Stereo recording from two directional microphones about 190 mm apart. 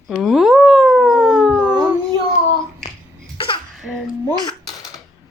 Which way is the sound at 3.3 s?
25° left (ahead or behind).